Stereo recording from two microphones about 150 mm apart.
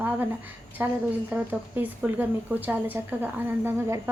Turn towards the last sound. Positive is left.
turn(degrees=-15)  # may be behind; listen again after turning